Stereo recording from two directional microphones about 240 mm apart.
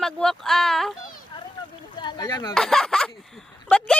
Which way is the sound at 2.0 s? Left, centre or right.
Centre.